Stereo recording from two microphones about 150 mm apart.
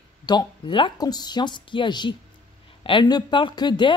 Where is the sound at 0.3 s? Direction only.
30° left (ahead or behind).